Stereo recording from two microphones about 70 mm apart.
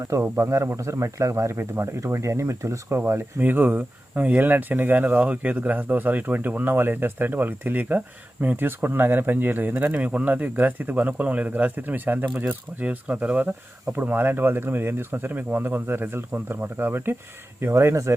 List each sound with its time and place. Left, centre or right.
0.3 s speech: right
3.0 s speech: right